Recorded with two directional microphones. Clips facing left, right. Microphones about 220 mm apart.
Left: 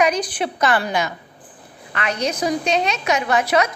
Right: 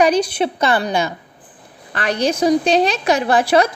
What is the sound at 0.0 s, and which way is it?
A woman's voice, 30° right (ahead or behind).